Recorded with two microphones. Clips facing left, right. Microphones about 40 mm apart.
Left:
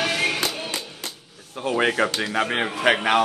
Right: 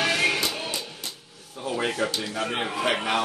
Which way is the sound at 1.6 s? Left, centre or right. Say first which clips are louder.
Left 6 dB; left.